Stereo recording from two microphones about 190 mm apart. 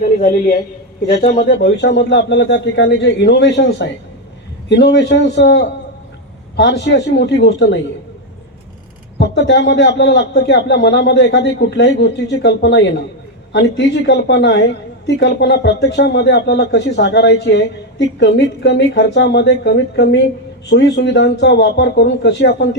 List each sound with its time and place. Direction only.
0.0 s a man's voice: 50° left (ahead or behind); by 7.8 s 65° left (ahead or behind)
9.1 s a woman's voice: 65° left (ahead or behind)